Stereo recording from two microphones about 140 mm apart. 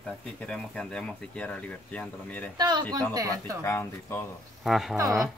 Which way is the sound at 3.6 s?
15° left (ahead or behind).